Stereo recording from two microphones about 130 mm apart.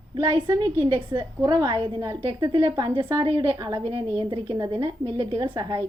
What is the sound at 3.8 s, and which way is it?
A woman's voice, 45° right (ahead or behind).